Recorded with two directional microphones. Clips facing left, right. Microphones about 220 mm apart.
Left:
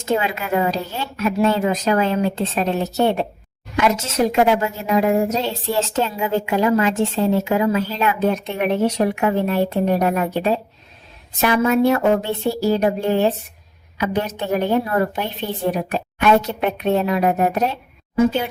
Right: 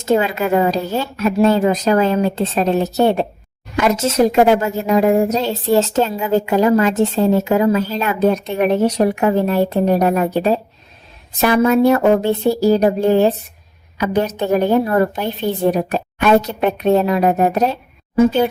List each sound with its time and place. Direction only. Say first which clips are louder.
0.0 s a woman's voice: right 5 dB; 40° right (ahead or behind)